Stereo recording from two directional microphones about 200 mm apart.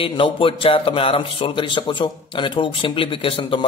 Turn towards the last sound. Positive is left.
turn(degrees=25)  # may be behind; listen again after turning